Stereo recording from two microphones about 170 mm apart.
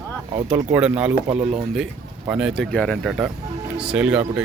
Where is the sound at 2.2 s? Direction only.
5° right (ahead or behind).